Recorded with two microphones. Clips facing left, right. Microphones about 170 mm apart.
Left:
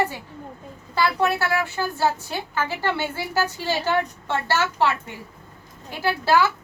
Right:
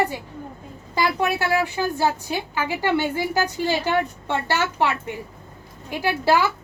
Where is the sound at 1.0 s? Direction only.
15° right (ahead or behind).